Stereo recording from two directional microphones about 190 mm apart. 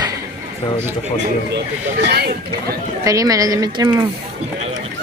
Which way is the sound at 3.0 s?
20° right (ahead or behind).